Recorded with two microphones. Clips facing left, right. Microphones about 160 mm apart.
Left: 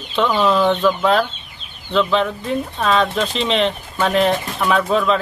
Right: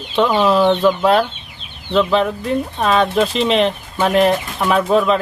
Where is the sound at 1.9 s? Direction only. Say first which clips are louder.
Right 2 dB; 5° right (ahead or behind).